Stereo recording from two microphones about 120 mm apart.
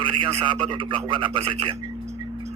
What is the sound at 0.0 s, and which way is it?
A man's voice, 45° right (ahead or behind).